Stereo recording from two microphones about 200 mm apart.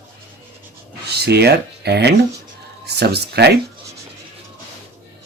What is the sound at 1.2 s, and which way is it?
Speech, 55° right (ahead or behind).